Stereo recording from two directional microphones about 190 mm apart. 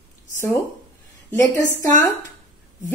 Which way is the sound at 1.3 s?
15° left (ahead or behind).